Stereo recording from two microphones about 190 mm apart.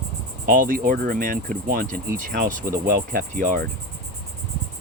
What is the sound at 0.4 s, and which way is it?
Speech, 45° right (ahead or behind).